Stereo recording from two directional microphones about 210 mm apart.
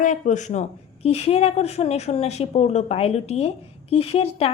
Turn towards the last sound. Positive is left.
turn(degrees=30)  # may be behind; listen again after turning